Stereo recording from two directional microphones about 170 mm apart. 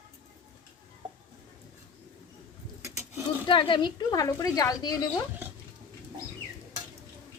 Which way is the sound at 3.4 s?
30° left (ahead or behind).